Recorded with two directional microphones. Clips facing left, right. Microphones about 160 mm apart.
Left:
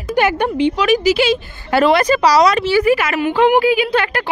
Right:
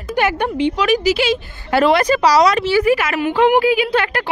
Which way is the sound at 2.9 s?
70° left (ahead or behind).